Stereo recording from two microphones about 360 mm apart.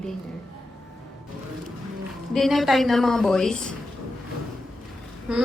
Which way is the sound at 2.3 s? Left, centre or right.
Centre.